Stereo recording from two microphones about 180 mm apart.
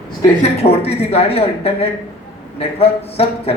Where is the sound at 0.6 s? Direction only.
35° left (ahead or behind).